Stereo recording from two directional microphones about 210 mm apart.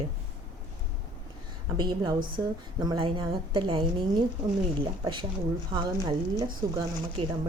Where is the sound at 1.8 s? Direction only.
20° right (ahead or behind).